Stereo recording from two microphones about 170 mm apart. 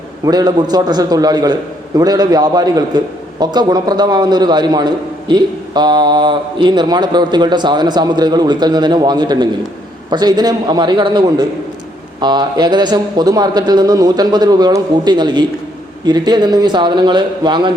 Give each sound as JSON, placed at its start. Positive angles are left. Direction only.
{"t": 0.3, "sound": "a man's voice", "side_deg": -25}